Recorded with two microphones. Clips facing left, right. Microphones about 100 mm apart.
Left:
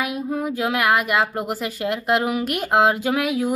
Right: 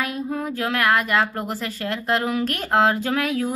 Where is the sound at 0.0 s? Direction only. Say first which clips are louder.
Left 2 dB; 10° left (ahead or behind).